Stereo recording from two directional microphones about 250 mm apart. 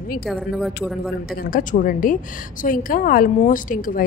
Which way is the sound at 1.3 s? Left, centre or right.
Left.